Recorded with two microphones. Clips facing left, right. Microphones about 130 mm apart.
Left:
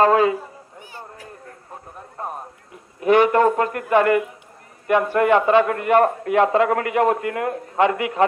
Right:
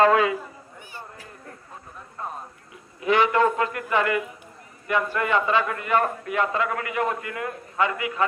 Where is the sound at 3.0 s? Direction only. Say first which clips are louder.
Left 5 dB; 50° left (ahead or behind).